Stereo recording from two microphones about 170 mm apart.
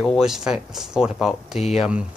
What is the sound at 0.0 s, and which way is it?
Speech, centre (ahead or behind).